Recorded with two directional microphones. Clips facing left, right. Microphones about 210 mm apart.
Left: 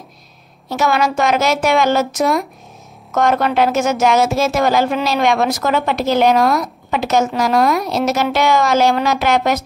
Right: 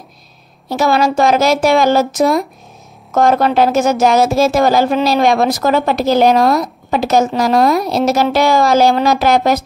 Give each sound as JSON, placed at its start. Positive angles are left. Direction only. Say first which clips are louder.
{"t": 0.7, "sound": "speech", "louder": "right 3 dB", "side_deg": -35}